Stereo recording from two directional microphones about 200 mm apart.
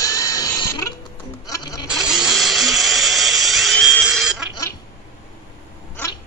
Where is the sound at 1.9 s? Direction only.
5° right (ahead or behind).